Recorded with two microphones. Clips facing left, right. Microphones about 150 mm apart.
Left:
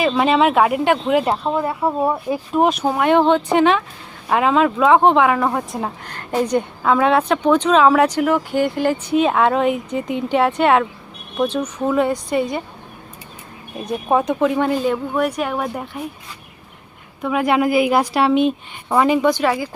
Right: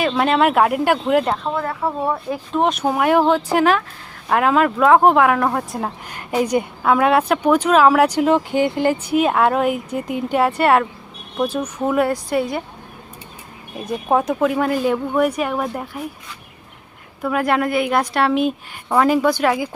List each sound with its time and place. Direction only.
0.0 s speech: centre (ahead or behind)
1.3 s speech: 15° left (ahead or behind); by 8.2 s 10° right (ahead or behind)
8.2 s a woman's voice: 20° right (ahead or behind)
13.9 s speech: centre (ahead or behind)
17.2 s a woman's voice: centre (ahead or behind)